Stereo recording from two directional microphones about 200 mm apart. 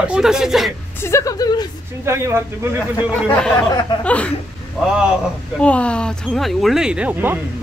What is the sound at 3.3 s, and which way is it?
Speech, 5° left (ahead or behind).